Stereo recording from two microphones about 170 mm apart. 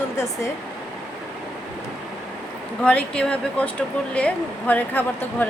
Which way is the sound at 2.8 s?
5° left (ahead or behind).